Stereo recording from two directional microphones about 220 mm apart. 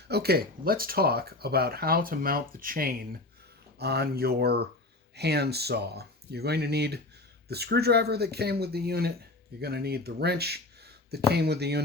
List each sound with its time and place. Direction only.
0.1 s speech: 45° right (ahead or behind)